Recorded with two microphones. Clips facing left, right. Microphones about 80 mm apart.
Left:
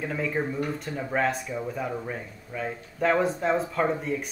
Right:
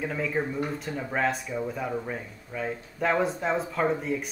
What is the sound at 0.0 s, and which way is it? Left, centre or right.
Speech, centre.